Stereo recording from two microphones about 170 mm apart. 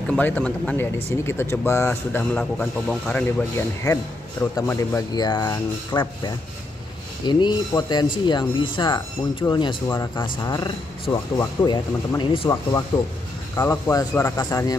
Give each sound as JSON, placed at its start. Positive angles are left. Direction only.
{"t": 0.1, "sound": "speech", "side_deg": 10}
{"t": 3.3, "sound": "speech", "side_deg": 15}